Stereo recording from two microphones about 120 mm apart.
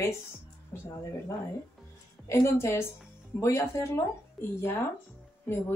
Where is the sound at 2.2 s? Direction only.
20° left (ahead or behind).